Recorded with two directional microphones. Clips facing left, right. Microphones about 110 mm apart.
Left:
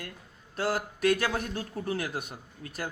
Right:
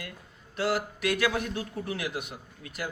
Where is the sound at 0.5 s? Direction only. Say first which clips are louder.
Right 1 dB; 40° left (ahead or behind).